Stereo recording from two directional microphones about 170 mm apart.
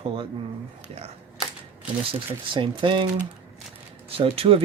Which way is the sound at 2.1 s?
30° right (ahead or behind).